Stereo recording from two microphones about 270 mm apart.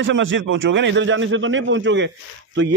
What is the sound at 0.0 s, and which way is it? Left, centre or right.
A man's voice, right.